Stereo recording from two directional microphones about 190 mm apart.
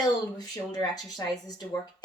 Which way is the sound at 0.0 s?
20° left (ahead or behind).